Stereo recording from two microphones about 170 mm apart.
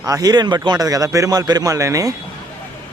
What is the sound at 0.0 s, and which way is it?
A man's voice, 20° right (ahead or behind).